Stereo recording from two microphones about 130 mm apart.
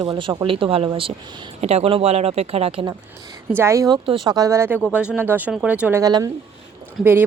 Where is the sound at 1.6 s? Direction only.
55° right (ahead or behind).